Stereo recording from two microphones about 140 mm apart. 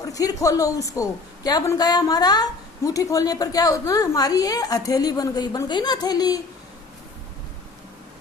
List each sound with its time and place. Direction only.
0.0 s a woman's voice: 25° left (ahead or behind)